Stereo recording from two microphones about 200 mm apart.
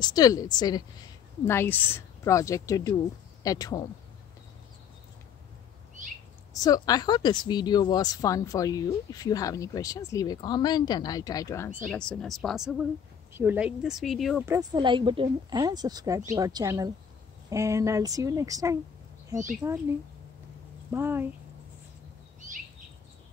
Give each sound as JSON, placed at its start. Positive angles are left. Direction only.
{"t": 0.0, "sound": "a woman's voice", "side_deg": 20}
{"t": 6.5, "sound": "speech", "side_deg": 20}
{"t": 11.8, "sound": "speech", "side_deg": 5}
{"t": 14.4, "sound": "a woman's voice", "side_deg": -15}
{"t": 20.9, "sound": "a woman's voice", "side_deg": -10}